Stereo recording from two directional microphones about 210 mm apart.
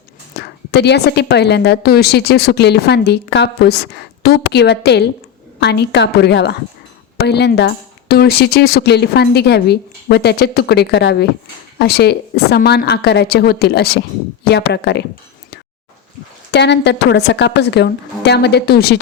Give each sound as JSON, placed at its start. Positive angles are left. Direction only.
{"t": 0.3, "sound": "speech", "side_deg": 50}
{"t": 16.5, "sound": "speech", "side_deg": 55}